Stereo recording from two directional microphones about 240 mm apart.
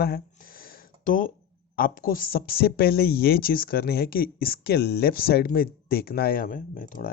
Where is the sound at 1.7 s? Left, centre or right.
Left.